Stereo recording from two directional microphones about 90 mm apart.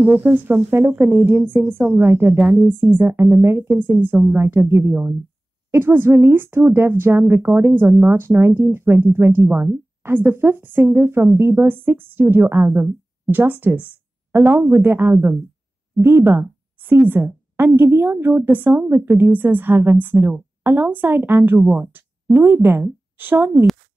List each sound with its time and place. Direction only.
0.0 s a woman's voice: 20° right (ahead or behind)